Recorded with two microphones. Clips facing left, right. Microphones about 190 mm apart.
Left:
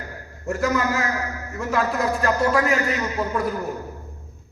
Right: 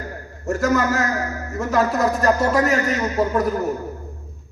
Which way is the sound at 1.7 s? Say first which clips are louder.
Right 3 dB; 40° right (ahead or behind).